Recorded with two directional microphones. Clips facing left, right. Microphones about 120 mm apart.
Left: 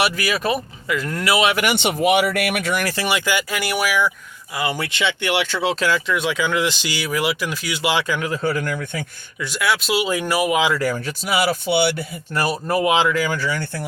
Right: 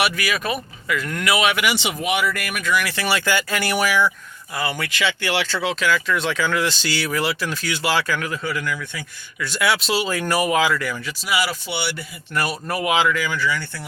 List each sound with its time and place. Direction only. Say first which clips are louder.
0.0 s speech: left 2 dB; 30° left (ahead or behind)
1.5 s speech: left 3 dB; 55° left (ahead or behind)
2.8 s speech: left 3 dB; 35° left (ahead or behind)
3.1 s speech: right 2 dB; 15° left (ahead or behind)
4.7 s speech: left 1 dB; 25° left (ahead or behind)
5.6 s speech: left 1 dB; 30° left (ahead or behind)
6.1 s speech: left 1 dB; 15° left (ahead or behind)
8.3 s speech: left 4 dB; 40° left (ahead or behind)
9.5 s speech: even; centre (ahead or behind)
10.8 s speech: left 5 dB; 40° left (ahead or behind)
12.3 s speech: left 3 dB; 30° left (ahead or behind)
13.4 s speech: even; 45° left (ahead or behind)